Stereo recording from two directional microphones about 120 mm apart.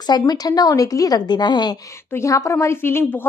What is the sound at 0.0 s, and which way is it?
A woman's voice, 35° left (ahead or behind).